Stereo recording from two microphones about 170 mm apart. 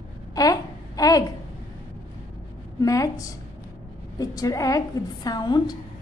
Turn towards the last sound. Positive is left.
turn(degrees=25)  # may be behind; listen again after turning